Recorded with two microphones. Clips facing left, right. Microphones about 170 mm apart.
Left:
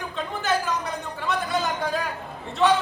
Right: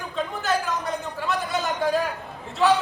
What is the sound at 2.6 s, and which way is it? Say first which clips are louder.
Speech: even; centre (ahead or behind).